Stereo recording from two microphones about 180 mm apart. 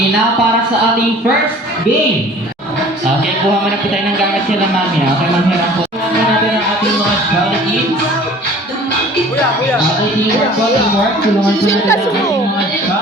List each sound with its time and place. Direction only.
11.6 s speech: 15° left (ahead or behind)